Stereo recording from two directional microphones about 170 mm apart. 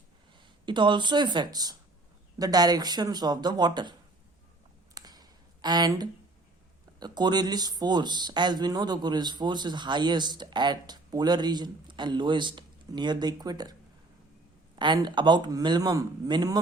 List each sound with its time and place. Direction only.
0.3 s speech: 30° right (ahead or behind)
4.9 s a sound: 25° right (ahead or behind)
7.0 s speech: 25° right (ahead or behind)
14.8 s speech: 25° right (ahead or behind)